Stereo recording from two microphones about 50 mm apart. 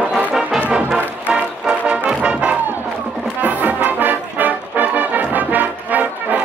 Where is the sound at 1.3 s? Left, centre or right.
Right.